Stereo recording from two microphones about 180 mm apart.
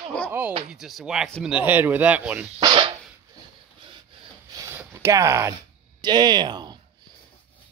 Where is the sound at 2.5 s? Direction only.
30° right (ahead or behind).